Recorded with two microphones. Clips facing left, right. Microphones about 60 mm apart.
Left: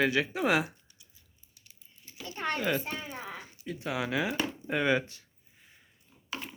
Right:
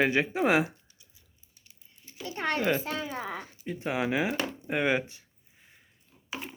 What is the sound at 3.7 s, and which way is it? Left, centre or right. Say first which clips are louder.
Speech: right 3 dB; right.